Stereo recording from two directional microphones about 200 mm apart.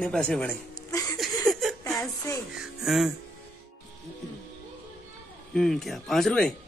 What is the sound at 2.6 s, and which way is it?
Speech, centre (ahead or behind).